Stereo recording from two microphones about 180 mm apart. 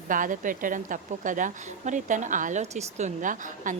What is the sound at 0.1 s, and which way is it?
A woman's voice, 45° right (ahead or behind).